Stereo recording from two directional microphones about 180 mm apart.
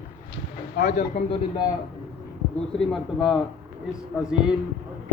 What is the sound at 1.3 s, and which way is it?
Speech, 25° left (ahead or behind).